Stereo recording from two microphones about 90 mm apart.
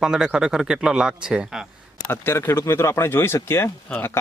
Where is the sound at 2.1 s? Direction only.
25° left (ahead or behind).